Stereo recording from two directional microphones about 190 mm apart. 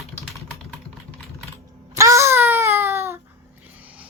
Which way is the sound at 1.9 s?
15° right (ahead or behind).